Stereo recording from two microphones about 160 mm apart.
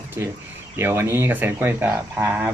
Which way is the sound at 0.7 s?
15° right (ahead or behind).